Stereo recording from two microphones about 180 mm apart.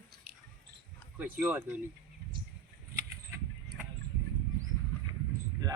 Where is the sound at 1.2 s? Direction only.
10° right (ahead or behind).